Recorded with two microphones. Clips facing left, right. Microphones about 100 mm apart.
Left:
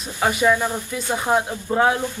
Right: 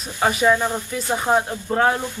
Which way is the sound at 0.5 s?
15° right (ahead or behind).